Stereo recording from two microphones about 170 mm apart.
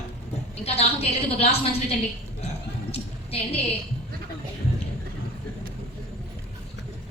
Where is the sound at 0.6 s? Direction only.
35° left (ahead or behind).